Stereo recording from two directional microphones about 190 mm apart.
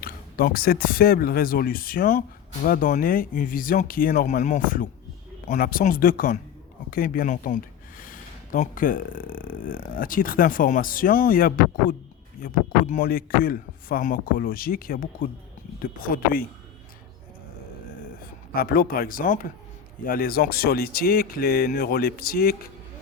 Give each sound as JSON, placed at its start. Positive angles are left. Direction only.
{"t": 0.0, "sound": "speech", "side_deg": 50}
{"t": 18.5, "sound": "speech", "side_deg": 50}